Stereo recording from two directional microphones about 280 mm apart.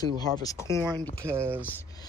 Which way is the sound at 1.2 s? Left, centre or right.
Centre.